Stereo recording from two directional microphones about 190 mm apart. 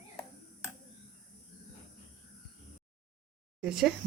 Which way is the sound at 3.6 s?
5° right (ahead or behind).